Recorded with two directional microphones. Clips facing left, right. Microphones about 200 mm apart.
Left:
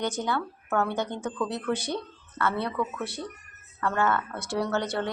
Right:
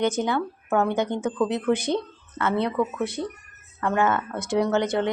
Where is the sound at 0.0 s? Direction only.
20° right (ahead or behind).